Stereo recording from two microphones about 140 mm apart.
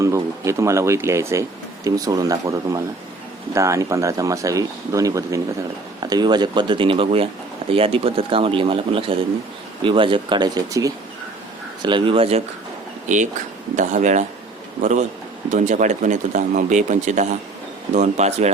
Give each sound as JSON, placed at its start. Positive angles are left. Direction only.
{"t": 0.0, "sound": "speech", "side_deg": -20}
{"t": 13.7, "sound": "speech", "side_deg": -60}